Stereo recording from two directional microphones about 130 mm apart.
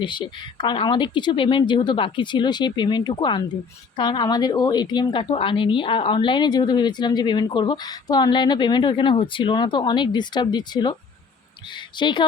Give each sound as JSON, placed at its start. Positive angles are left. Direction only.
{"t": 0.0, "sound": "a woman's voice", "side_deg": 35}
{"t": 11.9, "sound": "a woman's voice", "side_deg": 35}